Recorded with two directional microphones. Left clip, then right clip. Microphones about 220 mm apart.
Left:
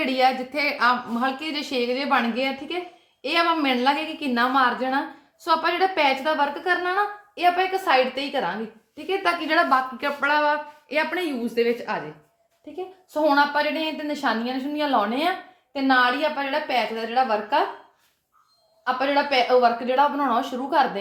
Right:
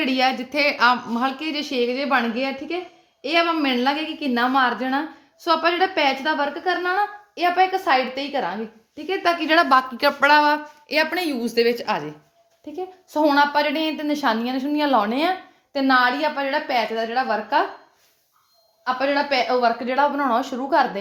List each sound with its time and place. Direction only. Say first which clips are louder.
0.0 s a woman's voice: even; 35° right (ahead or behind)
18.9 s a woman's voice: even; 25° right (ahead or behind)